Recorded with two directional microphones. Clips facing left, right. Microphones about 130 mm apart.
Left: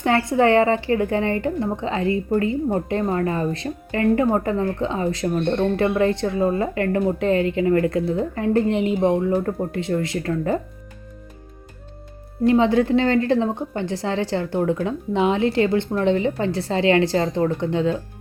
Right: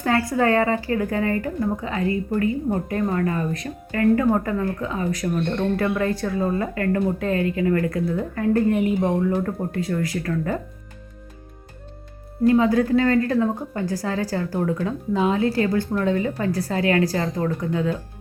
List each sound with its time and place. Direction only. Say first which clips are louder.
0.0 s speech: left 3 dB; 25° left (ahead or behind)
12.5 s speech: left 1 dB; 25° left (ahead or behind)